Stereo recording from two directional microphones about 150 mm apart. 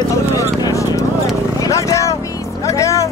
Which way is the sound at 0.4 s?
20° left (ahead or behind).